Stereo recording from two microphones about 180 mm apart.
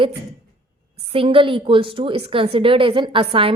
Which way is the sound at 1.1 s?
30° right (ahead or behind).